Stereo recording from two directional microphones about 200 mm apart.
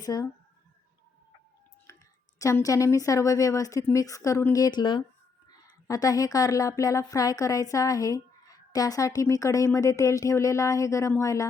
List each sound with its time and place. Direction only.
0.0 s speech: 20° left (ahead or behind)
2.4 s a woman's voice: 15° left (ahead or behind)